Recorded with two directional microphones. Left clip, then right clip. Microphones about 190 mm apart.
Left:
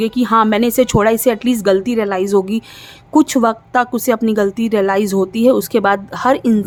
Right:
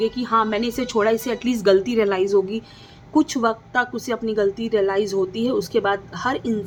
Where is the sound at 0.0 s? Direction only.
50° left (ahead or behind).